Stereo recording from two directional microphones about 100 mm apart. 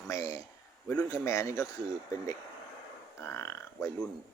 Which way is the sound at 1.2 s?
30° left (ahead or behind).